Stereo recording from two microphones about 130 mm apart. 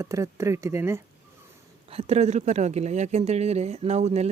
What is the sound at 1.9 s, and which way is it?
Speech, 50° right (ahead or behind).